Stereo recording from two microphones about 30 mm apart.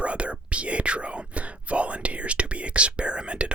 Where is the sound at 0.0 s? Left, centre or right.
Right.